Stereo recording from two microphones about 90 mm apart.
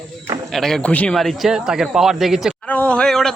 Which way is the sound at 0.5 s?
5° left (ahead or behind).